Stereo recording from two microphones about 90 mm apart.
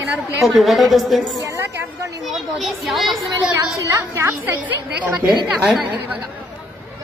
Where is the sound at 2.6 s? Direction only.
Centre (ahead or behind).